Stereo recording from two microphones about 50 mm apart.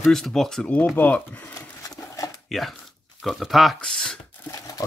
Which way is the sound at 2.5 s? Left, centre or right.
Centre.